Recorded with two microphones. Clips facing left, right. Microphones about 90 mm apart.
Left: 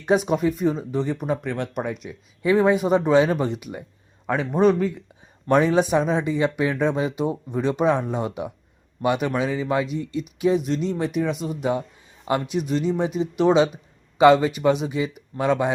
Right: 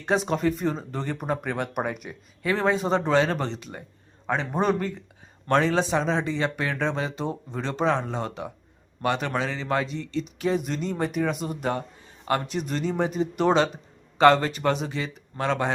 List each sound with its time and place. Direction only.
0.1 s speech: 5° left (ahead or behind)
2.4 s speech: 15° left (ahead or behind)
4.5 s speech: centre (ahead or behind)
5.5 s speech: 15° left (ahead or behind)